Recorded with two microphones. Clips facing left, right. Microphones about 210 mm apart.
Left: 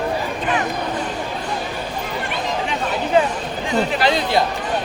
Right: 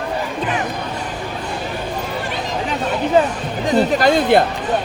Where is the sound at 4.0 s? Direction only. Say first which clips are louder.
Right 6 dB; 50° right (ahead or behind).